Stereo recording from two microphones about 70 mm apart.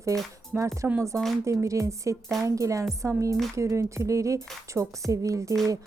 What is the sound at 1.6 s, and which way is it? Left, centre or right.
Speech, right.